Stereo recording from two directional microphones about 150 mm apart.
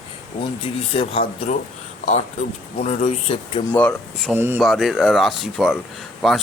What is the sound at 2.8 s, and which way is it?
Speech, 45° left (ahead or behind).